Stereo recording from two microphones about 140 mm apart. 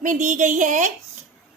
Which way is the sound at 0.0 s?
65° right (ahead or behind).